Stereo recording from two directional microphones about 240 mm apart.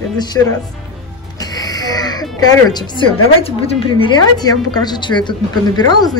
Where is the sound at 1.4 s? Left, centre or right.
Centre.